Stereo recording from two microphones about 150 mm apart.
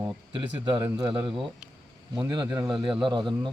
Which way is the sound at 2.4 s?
30° right (ahead or behind).